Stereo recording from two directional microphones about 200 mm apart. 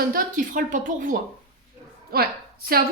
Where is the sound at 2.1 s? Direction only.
50° right (ahead or behind).